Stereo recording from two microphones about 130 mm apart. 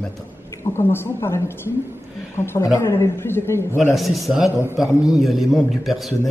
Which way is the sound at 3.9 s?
Centre (ahead or behind).